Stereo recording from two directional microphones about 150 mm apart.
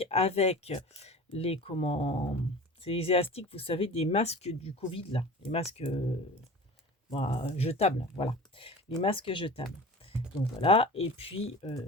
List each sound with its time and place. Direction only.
0.0 s speech: 45° left (ahead or behind)
7.1 s speech: 40° left (ahead or behind)